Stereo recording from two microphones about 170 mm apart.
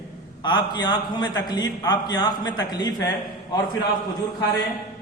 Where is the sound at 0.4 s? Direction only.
25° left (ahead or behind).